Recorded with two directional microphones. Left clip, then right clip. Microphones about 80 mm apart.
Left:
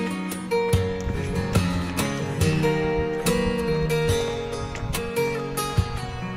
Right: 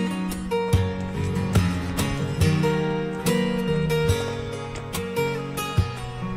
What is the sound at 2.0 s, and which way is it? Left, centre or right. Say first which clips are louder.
Music: even; right.